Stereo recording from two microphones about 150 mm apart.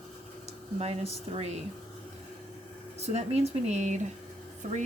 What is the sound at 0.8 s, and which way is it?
Speech, 45° right (ahead or behind).